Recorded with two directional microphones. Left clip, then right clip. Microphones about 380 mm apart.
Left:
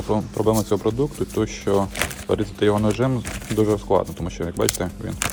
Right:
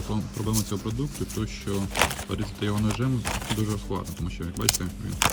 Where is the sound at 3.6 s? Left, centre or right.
Left.